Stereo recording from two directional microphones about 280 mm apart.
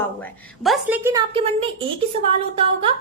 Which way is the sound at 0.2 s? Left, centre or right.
Centre.